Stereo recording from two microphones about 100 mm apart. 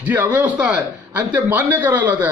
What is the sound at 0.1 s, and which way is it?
A man's voice, 15° right (ahead or behind).